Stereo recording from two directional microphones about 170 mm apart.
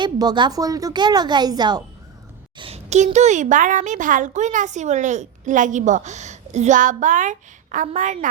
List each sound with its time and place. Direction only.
0.0 s a woman's voice: 25° right (ahead or behind)
2.6 s a woman's voice: 35° right (ahead or behind)